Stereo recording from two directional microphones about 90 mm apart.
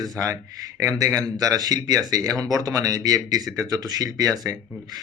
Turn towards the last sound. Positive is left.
turn(degrees=-40)  # may be behind; listen again after turning